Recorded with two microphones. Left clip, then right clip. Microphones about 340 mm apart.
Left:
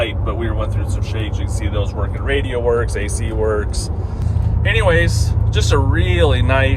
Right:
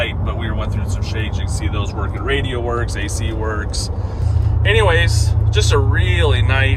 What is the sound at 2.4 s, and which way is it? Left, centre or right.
Speech, centre.